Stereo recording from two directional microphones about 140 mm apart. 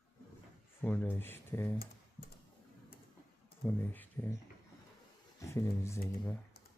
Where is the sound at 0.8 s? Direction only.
10° left (ahead or behind).